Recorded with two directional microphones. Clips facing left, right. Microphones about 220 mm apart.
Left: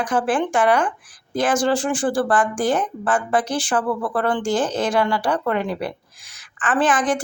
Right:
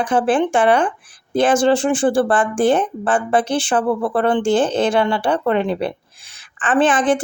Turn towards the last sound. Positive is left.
turn(degrees=-25)  # may be behind; listen again after turning